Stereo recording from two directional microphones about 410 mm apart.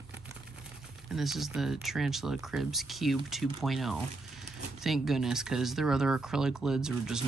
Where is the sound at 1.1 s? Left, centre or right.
Centre.